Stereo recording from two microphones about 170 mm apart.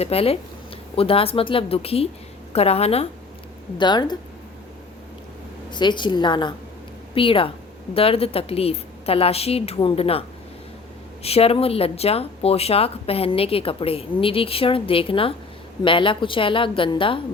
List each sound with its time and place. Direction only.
0.0 s speech: 35° left (ahead or behind)
3.8 s a woman's voice: 25° left (ahead or behind)
5.7 s a woman's voice: 25° left (ahead or behind)